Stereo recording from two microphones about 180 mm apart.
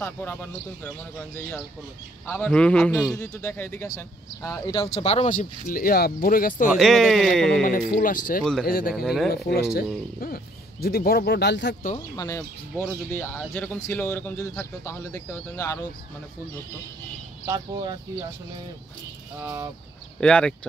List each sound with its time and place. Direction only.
0.0 s a man's voice: 10° left (ahead or behind)
4.6 s speech: 35° left (ahead or behind); by 6.7 s 50° left (ahead or behind)
6.7 s a man's voice: centre (ahead or behind)
7.6 s speech: 50° left (ahead or behind)
8.9 s a man's voice: centre (ahead or behind)
9.5 s speech: 60° left (ahead or behind)
12.2 s speech: 15° left (ahead or behind)
19.4 s chicken: 10° right (ahead or behind)
20.2 s a man's voice: 5° left (ahead or behind)